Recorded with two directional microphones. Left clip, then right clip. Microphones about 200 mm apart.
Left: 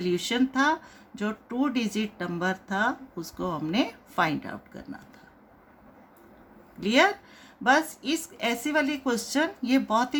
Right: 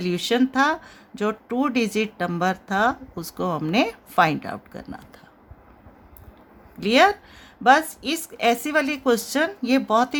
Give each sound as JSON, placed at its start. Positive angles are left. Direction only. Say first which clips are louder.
{"t": 0.0, "sound": "speech", "louder": "right 4 dB", "side_deg": -35}
{"t": 6.7, "sound": "speech", "louder": "right 5 dB", "side_deg": -35}